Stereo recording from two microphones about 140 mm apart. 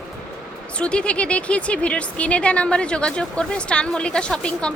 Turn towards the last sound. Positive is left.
turn(degrees=5)  # may be behind; listen again after turning